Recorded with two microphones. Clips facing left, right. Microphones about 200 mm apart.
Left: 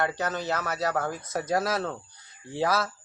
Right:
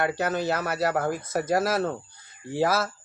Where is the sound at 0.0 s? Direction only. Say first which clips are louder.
Right 3 dB; 10° right (ahead or behind).